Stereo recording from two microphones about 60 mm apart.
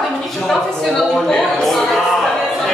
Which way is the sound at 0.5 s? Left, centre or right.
Centre.